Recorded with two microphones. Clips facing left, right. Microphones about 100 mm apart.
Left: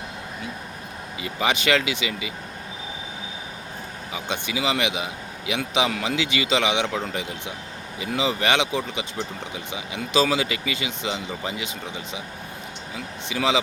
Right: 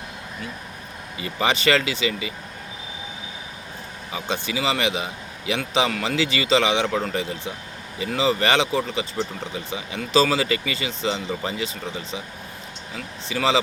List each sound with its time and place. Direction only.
1.2 s a man's voice: 5° left (ahead or behind)
4.1 s a man's voice: 10° left (ahead or behind)
13.2 s a man's voice: 10° left (ahead or behind)